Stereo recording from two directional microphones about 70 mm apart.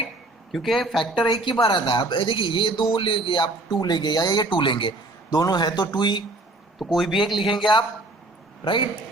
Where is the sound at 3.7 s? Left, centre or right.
Left.